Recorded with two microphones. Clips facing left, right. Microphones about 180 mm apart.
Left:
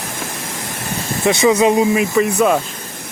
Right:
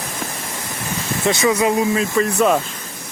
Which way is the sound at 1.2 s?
20° left (ahead or behind).